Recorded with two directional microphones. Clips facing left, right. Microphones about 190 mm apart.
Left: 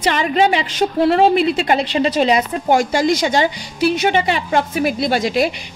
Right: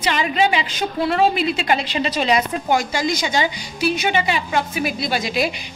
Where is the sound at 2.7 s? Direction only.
50° left (ahead or behind).